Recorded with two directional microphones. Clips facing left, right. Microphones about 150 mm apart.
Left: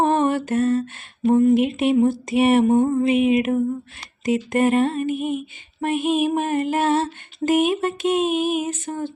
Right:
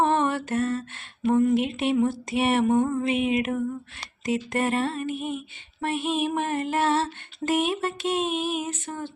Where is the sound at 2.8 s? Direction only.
25° left (ahead or behind).